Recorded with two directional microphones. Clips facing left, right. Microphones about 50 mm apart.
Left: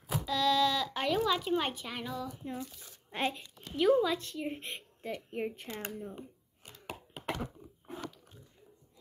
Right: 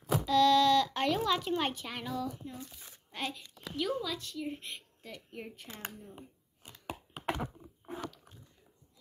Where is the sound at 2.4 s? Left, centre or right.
Left.